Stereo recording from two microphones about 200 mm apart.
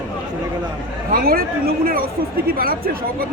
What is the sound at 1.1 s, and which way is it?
Speech, 50° right (ahead or behind).